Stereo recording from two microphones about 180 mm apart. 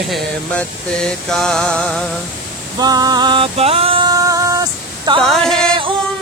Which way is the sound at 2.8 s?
20° right (ahead or behind).